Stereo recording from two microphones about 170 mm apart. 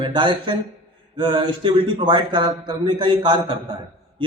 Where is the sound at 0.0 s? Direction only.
30° right (ahead or behind).